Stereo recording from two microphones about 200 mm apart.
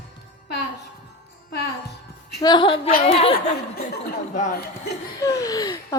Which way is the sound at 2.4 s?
20° left (ahead or behind).